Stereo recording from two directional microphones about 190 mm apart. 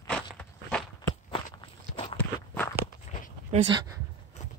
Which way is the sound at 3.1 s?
35° left (ahead or behind).